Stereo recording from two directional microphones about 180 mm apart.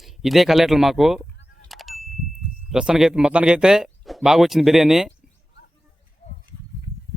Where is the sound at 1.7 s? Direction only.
Centre (ahead or behind).